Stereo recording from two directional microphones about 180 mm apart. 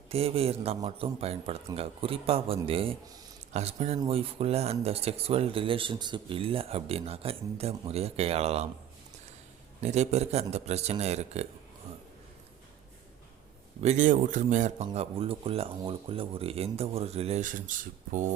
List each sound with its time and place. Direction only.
0.1 s speech: 35° right (ahead or behind)
9.8 s speech: 40° right (ahead or behind)
13.8 s a man's voice: 45° right (ahead or behind)
14.8 s speech: 30° right (ahead or behind)